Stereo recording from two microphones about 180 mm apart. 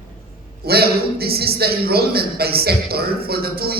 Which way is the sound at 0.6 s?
60° right (ahead or behind).